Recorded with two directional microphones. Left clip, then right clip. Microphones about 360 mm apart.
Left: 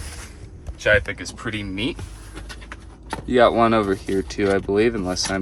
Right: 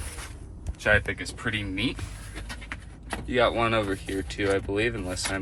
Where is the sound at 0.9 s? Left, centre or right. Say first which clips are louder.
Left 5 dB; centre.